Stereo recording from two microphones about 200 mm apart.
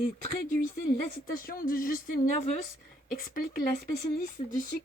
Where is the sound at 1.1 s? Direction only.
45° left (ahead or behind).